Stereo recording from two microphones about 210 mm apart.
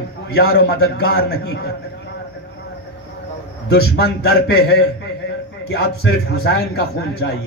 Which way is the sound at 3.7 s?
50° left (ahead or behind).